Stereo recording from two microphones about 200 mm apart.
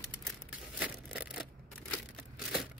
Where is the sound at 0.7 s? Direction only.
5° right (ahead or behind).